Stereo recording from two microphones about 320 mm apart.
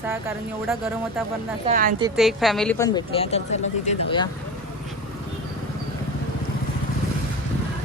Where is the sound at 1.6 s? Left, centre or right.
Right.